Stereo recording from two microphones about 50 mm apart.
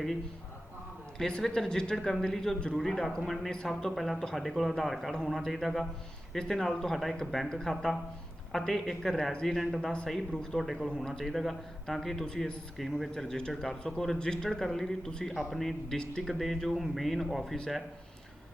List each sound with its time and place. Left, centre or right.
1.3 s speech: centre
9.6 s speech: centre
12.7 s speech: centre
13.1 s speech: centre